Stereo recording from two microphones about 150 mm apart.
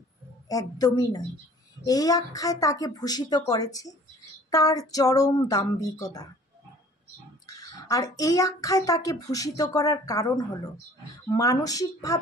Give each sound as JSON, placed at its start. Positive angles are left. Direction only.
{"t": 0.5, "sound": "speech", "side_deg": 25}
{"t": 7.4, "sound": "speech", "side_deg": 25}